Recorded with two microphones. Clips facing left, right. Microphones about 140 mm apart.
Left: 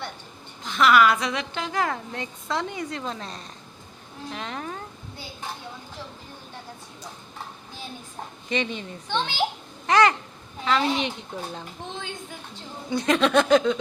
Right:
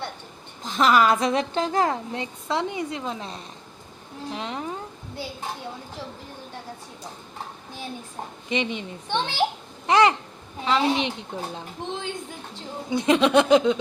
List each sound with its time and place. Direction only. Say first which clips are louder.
0.6 s a woman's voice: even; 35° right (ahead or behind); by 4.8 s 20° right (ahead or behind)
8.4 s a woman's voice: right 1 dB; 20° right (ahead or behind)
9.8 s babbling: right 1 dB; 25° right (ahead or behind)
10.7 s a woman's voice: right 1 dB; 25° right (ahead or behind)
12.9 s a woman's voice: right 2 dB; 20° right (ahead or behind)